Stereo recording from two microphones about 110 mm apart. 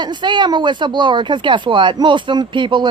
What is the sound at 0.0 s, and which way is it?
Speech, 45° right (ahead or behind).